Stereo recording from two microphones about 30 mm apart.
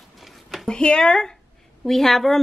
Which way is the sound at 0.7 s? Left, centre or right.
Left.